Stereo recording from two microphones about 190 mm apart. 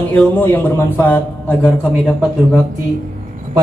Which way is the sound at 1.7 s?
5° right (ahead or behind).